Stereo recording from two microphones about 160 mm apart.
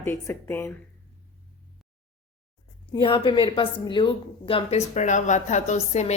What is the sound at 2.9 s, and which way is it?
A woman's voice, 30° left (ahead or behind).